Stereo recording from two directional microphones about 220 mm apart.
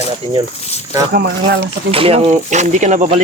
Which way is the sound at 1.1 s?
45° right (ahead or behind).